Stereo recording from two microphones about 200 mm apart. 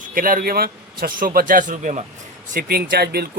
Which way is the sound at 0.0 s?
45° right (ahead or behind).